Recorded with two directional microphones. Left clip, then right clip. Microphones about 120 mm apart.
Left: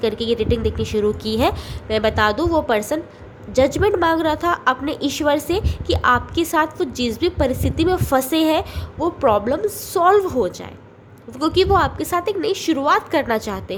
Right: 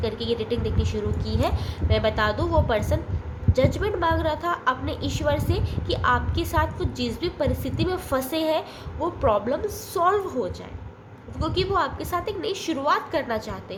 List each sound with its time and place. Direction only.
0.0 s a woman's voice: 55° left (ahead or behind)
1.2 s a woman's voice: 75° left (ahead or behind)